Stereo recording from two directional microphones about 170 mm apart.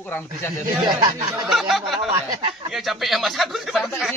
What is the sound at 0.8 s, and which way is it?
Speech, 25° right (ahead or behind).